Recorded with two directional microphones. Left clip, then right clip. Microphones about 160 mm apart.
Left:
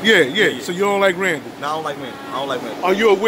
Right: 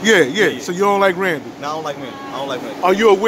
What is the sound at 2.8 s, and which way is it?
Speech, 30° right (ahead or behind).